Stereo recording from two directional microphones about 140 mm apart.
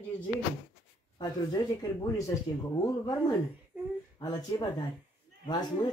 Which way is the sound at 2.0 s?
25° left (ahead or behind).